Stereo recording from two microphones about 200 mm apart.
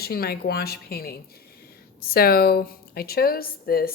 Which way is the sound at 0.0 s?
50° left (ahead or behind).